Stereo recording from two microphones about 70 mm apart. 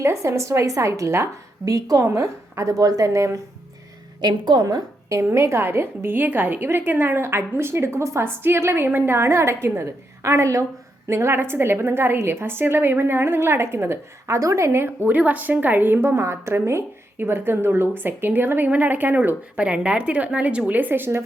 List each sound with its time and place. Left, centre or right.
0.0 s a woman's voice: right
1.6 s a woman's voice: right
2.0 s a woman's voice: right
4.2 s a woman's voice: right
4.6 s a woman's voice: right
14.3 s a woman's voice: right
15.1 s speech: right
19.6 s speech: centre; by 21.2 s right